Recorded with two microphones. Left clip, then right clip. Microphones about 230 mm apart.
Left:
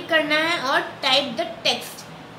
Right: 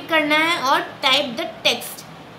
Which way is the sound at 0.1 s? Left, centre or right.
Right.